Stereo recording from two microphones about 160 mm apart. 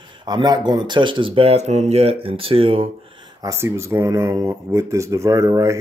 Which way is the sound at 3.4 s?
20° right (ahead or behind).